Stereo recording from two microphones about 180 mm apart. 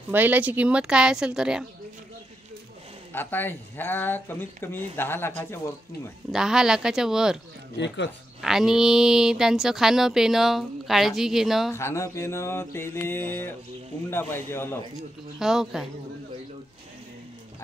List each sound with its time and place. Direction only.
0.1 s speech: 10° right (ahead or behind)
3.1 s mantra: 10° left (ahead or behind)
6.3 s speech: 5° right (ahead or behind)
7.7 s speech: 75° left (ahead or behind)
8.4 s speech: 5° right (ahead or behind)
11.7 s mantra: 15° left (ahead or behind)
15.0 s speech: centre (ahead or behind)